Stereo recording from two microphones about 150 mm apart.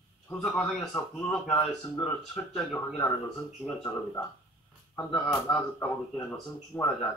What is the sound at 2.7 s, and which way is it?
Speech, 15° left (ahead or behind).